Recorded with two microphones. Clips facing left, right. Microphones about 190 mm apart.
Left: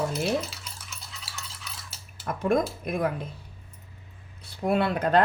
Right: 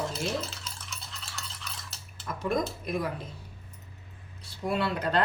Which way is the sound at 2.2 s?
55° left (ahead or behind).